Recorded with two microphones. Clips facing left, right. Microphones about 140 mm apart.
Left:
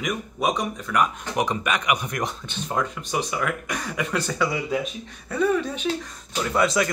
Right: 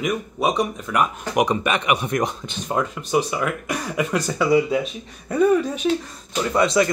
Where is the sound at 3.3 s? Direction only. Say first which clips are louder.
Right 3 dB; 10° right (ahead or behind).